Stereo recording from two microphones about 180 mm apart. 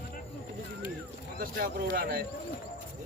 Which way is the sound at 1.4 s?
50° right (ahead or behind).